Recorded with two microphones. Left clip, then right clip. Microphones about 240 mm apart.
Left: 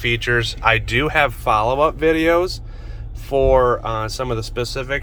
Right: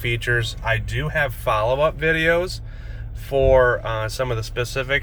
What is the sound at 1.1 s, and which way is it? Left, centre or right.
Speech, centre.